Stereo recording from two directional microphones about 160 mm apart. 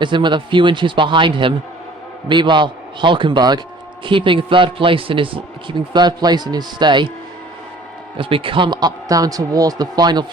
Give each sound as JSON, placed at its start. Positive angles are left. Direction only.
{"t": 0.0, "sound": "a man's voice", "side_deg": -30}
{"t": 8.2, "sound": "speech", "side_deg": -35}